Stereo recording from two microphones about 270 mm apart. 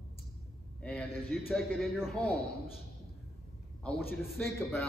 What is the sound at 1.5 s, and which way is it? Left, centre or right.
Speech, centre.